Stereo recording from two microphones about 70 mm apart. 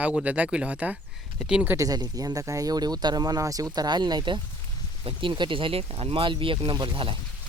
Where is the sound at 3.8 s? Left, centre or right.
Right.